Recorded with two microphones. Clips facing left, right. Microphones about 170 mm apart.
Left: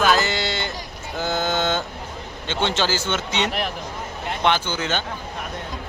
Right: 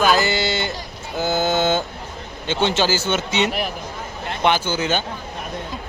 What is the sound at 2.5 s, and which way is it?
Speech, 10° right (ahead or behind).